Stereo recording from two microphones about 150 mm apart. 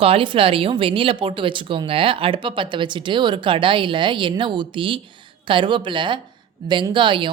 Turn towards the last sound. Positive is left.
turn(degrees=-30)  # may be behind; listen again after turning